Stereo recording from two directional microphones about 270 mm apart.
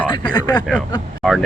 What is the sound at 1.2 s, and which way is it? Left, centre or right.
Speech, centre.